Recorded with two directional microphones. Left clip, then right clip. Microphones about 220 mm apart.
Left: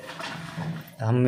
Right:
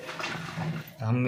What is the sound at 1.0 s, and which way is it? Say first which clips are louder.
Speech: left 6 dB; 40° left (ahead or behind).